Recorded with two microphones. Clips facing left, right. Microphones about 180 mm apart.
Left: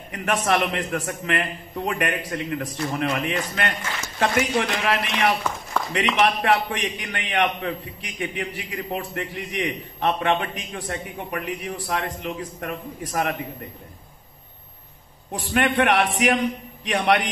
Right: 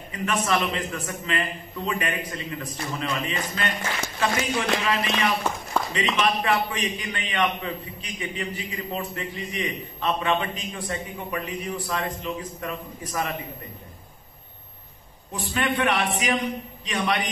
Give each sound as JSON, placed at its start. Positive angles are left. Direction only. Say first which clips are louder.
{"t": 0.1, "sound": "a man's voice", "louder": "left 2 dB", "side_deg": 65}
{"t": 15.3, "sound": "a man's voice", "louder": "left 4 dB", "side_deg": 65}